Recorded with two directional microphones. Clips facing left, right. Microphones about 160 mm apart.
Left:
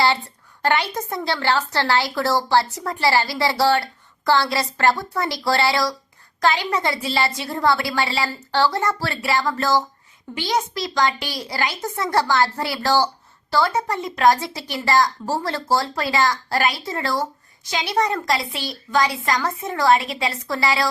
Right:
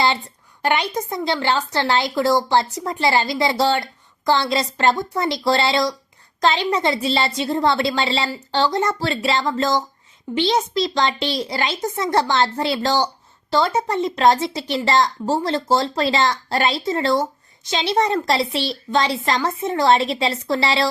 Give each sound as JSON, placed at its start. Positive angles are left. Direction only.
{"t": 0.6, "sound": "speech", "side_deg": -15}